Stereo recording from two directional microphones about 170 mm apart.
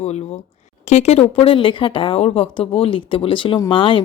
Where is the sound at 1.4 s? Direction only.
30° left (ahead or behind).